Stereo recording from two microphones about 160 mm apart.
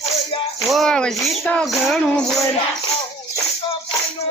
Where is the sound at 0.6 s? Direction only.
Centre (ahead or behind).